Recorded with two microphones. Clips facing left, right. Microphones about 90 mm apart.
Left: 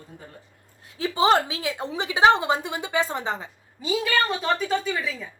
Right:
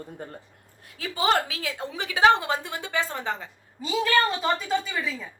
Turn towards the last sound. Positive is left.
turn(degrees=0)  # may be behind; listen again after turning